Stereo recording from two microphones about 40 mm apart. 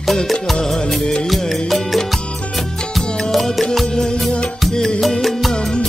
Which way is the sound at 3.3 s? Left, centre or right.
Centre.